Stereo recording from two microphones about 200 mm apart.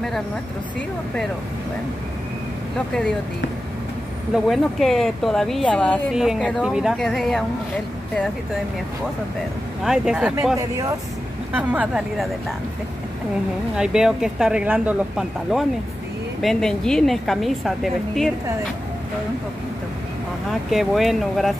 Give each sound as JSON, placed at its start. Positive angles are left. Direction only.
{"t": 0.7, "sound": "speech", "side_deg": 5}
{"t": 2.9, "sound": "speech", "side_deg": 5}
{"t": 4.5, "sound": "speech", "side_deg": 0}
{"t": 9.8, "sound": "speech", "side_deg": -5}
{"t": 10.6, "sound": "speech", "side_deg": -15}
{"t": 11.5, "sound": "speech", "side_deg": -5}
{"t": 13.7, "sound": "speech", "side_deg": -5}
{"t": 20.7, "sound": "speech", "side_deg": 0}